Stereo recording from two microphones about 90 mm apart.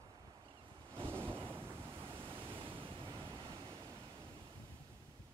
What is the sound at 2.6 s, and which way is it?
Waves, 75° right (ahead or behind).